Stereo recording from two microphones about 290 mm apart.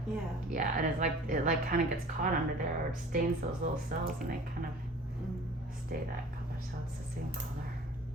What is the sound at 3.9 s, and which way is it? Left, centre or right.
Speech, right.